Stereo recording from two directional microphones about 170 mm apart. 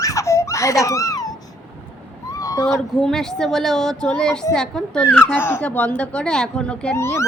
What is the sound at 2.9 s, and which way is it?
Speech, centre (ahead or behind).